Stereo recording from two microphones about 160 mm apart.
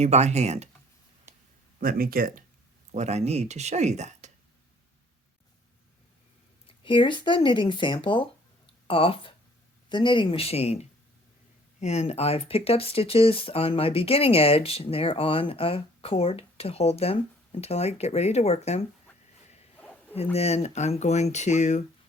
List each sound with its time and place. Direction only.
0.0 s speech: 45° right (ahead or behind)
1.8 s speech: 65° right (ahead or behind)
2.9 s speech: 45° right (ahead or behind)
6.7 s speech: 30° left (ahead or behind)
19.8 s a sound: 10° left (ahead or behind)
20.3 s speech: 40° left (ahead or behind)